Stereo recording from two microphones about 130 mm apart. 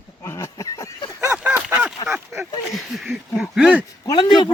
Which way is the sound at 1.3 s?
10° right (ahead or behind).